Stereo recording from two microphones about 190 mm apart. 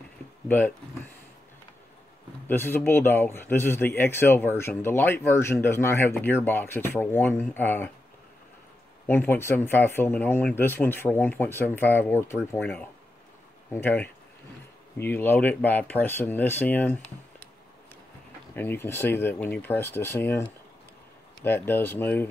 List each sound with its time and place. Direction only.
0.5 s speech: 10° left (ahead or behind)
2.4 s speech: 10° left (ahead or behind)
9.0 s speech: 10° left (ahead or behind)
18.5 s speech: 10° left (ahead or behind)